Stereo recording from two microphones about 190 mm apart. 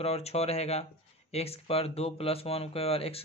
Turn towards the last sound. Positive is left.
turn(degrees=30)  # may be behind; listen again after turning